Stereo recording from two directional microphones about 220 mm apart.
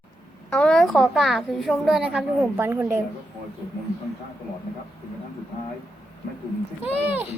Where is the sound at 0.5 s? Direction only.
5° left (ahead or behind).